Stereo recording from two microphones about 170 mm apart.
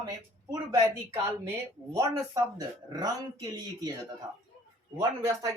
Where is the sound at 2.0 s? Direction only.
20° right (ahead or behind).